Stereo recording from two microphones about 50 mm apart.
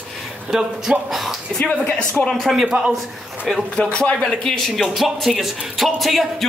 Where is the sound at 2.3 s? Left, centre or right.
Centre.